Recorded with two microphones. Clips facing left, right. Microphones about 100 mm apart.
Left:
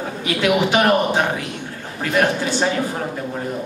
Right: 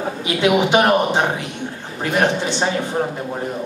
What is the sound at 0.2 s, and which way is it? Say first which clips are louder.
Speech: right 1 dB; 20° right (ahead or behind).